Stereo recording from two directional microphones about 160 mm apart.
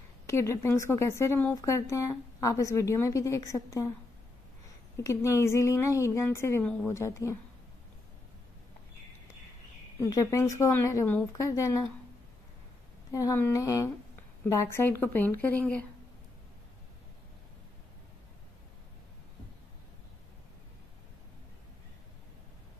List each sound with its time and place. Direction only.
0.3 s a woman's voice: 15° left (ahead or behind)
4.9 s a woman's voice: 20° left (ahead or behind)
9.9 s a woman's voice: 20° left (ahead or behind)
13.1 s a woman's voice: 20° left (ahead or behind)